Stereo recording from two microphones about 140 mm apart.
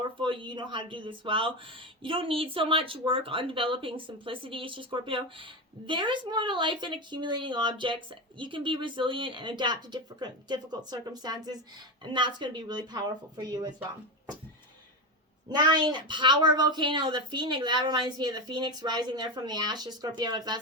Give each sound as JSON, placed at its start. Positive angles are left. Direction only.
{"t": 0.2, "sound": "speech", "side_deg": -35}
{"t": 15.4, "sound": "speech", "side_deg": -30}